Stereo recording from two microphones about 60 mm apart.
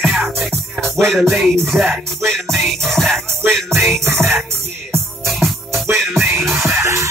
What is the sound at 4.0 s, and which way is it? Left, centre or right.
Music, right.